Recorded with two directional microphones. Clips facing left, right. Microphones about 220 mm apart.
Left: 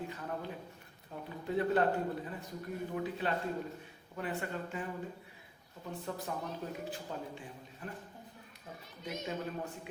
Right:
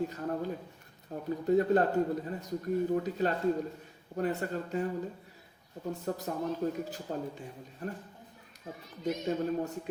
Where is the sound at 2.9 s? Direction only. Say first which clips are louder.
Right 5 dB; 40° right (ahead or behind).